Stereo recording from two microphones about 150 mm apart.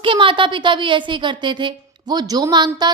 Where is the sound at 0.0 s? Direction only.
35° right (ahead or behind).